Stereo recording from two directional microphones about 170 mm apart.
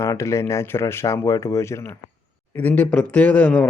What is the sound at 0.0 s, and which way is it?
A man's voice, 15° left (ahead or behind).